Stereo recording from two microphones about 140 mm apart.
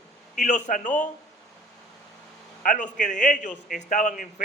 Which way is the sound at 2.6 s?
65° left (ahead or behind).